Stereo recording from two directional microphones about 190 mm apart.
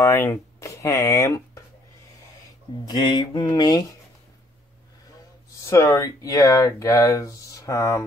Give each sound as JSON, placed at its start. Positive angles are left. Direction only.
{"t": 0.0, "sound": "speech", "side_deg": 15}
{"t": 2.8, "sound": "speech", "side_deg": 20}
{"t": 5.6, "sound": "speech", "side_deg": 15}